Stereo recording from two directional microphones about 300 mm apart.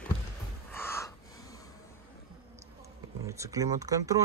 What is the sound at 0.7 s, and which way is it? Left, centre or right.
Gasp, centre.